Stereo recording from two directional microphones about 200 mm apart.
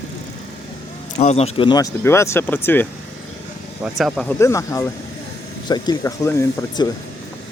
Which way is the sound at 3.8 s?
Centre (ahead or behind).